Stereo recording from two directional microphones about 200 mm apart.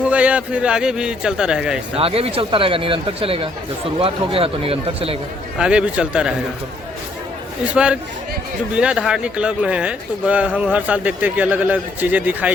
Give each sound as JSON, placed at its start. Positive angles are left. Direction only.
{"t": 0.1, "sound": "speech", "side_deg": -5}
{"t": 2.0, "sound": "speech", "side_deg": -30}
{"t": 5.5, "sound": "speech", "side_deg": -5}
{"t": 7.6, "sound": "speech", "side_deg": -5}